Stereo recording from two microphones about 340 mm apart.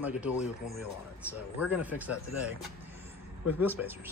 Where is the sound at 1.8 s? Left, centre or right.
Centre.